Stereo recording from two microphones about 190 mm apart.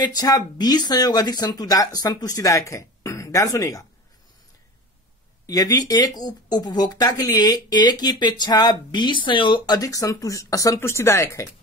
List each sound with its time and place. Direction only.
0.0 s speech: 20° left (ahead or behind)
5.5 s speech: 20° left (ahead or behind)